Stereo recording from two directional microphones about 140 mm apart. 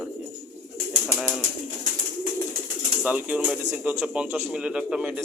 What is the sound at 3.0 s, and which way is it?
Speech, 10° right (ahead or behind).